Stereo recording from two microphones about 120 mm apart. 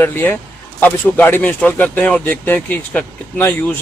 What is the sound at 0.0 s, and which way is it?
Speech, 15° left (ahead or behind).